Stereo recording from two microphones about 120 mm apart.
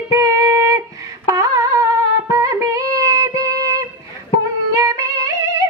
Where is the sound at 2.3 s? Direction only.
25° right (ahead or behind).